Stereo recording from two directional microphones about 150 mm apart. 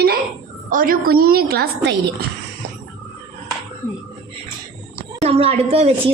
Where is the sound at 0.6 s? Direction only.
65° right (ahead or behind); by 1.7 s 90° right.